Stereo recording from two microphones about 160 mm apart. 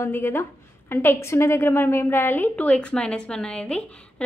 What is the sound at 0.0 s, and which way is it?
A woman's voice, 15° left (ahead or behind).